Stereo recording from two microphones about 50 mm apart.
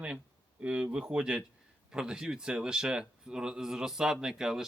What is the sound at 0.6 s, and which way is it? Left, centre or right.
Speech, right.